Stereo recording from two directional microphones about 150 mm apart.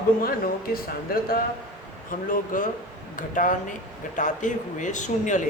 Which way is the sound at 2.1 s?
65° left (ahead or behind).